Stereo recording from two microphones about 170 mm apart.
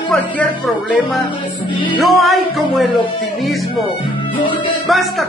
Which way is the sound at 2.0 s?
Centre (ahead or behind).